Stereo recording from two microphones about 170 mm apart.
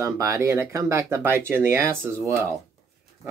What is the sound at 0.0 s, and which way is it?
Speech, 15° right (ahead or behind).